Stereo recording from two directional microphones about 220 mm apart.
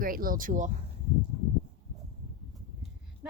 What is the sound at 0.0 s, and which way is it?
Speech, 40° right (ahead or behind).